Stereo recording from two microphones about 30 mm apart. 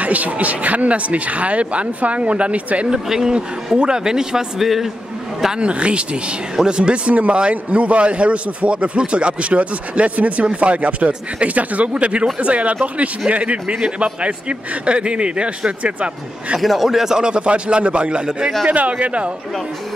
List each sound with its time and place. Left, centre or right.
0.0 s a man's voice: right
3.1 s a man's voice: centre
3.7 s speech: right
4.6 s a man's voice: centre
5.6 s a man's voice: right
6.5 s speech: right
6.8 s a man's voice: right
15.8 s a man's voice: right
16.5 s a man's voice: centre
17.2 s a man's voice: right